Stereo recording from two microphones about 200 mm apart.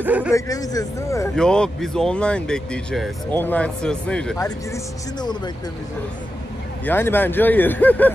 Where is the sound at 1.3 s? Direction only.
5° left (ahead or behind).